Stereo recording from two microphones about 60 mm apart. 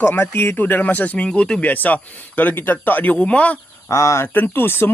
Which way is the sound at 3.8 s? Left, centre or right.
Left.